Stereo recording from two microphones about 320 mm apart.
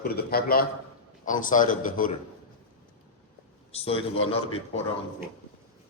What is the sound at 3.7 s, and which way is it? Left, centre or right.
Speech, centre.